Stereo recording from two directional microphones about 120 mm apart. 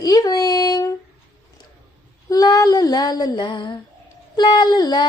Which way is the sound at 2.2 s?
30° left (ahead or behind).